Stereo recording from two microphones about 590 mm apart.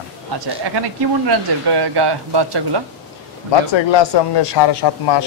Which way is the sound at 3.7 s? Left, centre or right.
Left.